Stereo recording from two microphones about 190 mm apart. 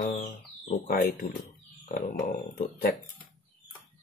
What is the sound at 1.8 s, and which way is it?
Speech, 45° left (ahead or behind).